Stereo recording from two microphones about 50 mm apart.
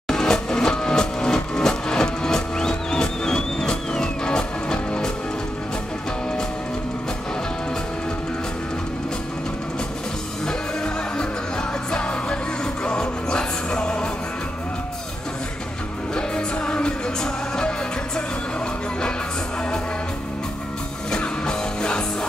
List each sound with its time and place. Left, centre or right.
0.1 s music: centre
11.9 s music: left
16.2 s music: centre
21.1 s music: centre